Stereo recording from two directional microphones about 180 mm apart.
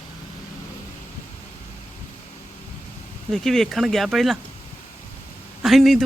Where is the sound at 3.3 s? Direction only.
Centre (ahead or behind).